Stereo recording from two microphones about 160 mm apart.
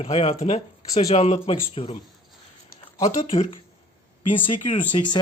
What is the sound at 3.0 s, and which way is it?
Speech, 35° left (ahead or behind).